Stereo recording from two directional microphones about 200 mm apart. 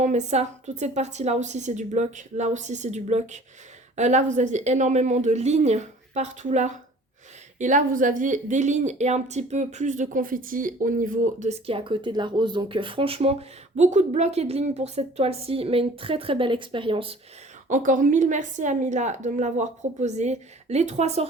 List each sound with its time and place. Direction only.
0.0 s a woman's voice: 35° right (ahead or behind)
17.7 s speech: 40° right (ahead or behind)